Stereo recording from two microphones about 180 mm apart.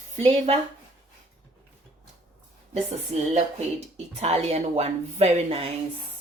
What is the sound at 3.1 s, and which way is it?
Speech, 35° right (ahead or behind).